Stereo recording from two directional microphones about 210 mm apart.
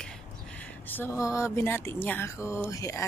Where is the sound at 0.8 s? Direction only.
10° left (ahead or behind).